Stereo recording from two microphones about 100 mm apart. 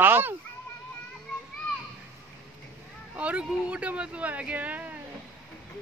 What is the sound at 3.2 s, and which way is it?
Speech, 15° right (ahead or behind).